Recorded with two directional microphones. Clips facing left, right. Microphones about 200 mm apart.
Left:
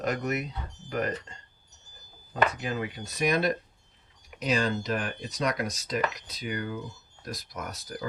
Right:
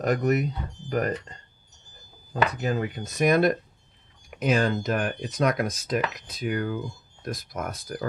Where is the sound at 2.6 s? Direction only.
45° right (ahead or behind).